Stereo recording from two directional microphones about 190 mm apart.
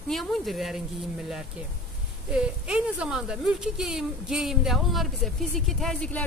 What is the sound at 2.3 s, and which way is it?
A woman's voice, 5° right (ahead or behind).